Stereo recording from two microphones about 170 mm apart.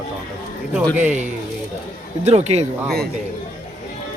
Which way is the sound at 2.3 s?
40° right (ahead or behind).